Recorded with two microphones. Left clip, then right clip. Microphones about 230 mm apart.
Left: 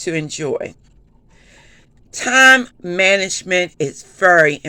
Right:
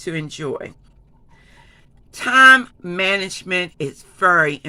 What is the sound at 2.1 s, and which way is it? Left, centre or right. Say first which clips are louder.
A man's voice: even; centre.